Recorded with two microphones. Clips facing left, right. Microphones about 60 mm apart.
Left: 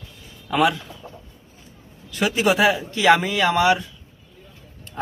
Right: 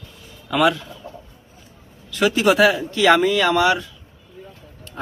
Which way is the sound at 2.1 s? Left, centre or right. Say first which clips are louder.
Right 3 dB; centre.